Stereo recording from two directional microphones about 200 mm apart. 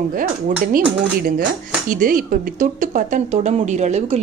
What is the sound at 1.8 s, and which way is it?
Speech, 45° right (ahead or behind).